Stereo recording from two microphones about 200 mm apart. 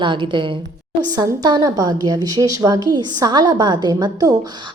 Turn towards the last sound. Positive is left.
turn(degrees=-20)  # may be behind; listen again after turning